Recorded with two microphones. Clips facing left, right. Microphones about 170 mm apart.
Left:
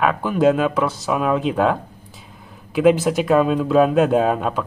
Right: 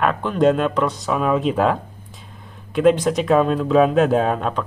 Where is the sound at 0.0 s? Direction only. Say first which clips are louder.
Even; 5° left (ahead or behind).